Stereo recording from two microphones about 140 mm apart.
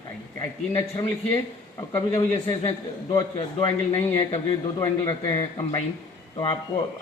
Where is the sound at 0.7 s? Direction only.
25° left (ahead or behind).